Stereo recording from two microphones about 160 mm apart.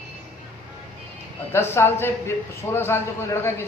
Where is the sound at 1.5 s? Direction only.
15° left (ahead or behind).